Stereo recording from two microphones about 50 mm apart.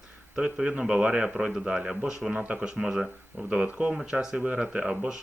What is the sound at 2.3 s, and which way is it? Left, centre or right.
Speech, right.